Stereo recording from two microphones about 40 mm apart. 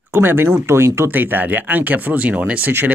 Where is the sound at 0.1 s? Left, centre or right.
Right.